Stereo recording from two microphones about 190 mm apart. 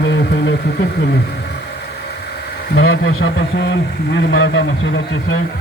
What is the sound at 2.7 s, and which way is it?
Speech, 90° left.